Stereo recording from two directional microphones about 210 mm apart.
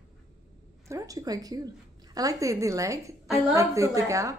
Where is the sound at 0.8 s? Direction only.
15° right (ahead or behind).